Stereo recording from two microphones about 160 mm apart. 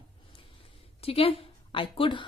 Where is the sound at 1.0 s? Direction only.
35° left (ahead or behind).